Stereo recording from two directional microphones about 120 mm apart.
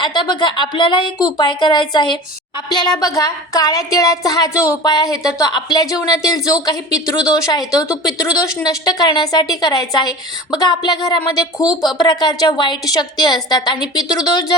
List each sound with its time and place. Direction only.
0.0 s a woman's voice: 40° left (ahead or behind)
11.6 s speech: 5° right (ahead or behind)
11.9 s a woman's voice: 40° left (ahead or behind)